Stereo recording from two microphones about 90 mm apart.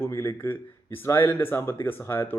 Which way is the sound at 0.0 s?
30° left (ahead or behind).